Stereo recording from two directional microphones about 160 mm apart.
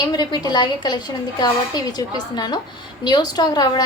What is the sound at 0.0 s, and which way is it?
A woman's voice, 25° left (ahead or behind).